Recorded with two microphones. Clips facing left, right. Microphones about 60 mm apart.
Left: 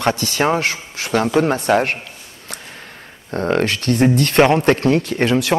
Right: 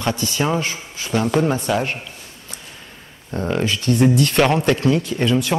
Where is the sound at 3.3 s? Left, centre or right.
Left.